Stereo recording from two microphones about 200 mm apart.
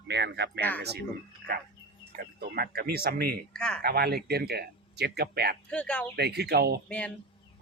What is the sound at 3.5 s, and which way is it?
Speech, 5° left (ahead or behind).